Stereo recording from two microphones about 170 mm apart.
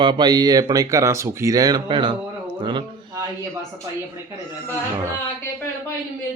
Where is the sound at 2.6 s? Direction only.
25° right (ahead or behind).